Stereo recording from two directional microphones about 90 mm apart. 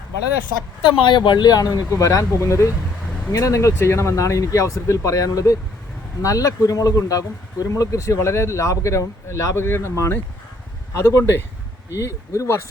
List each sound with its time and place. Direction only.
0.9 s speech: 65° left (ahead or behind); by 12.6 s 30° left (ahead or behind)